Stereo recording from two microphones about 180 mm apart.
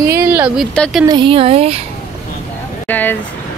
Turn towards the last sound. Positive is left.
turn(degrees=10)  # may be behind; listen again after turning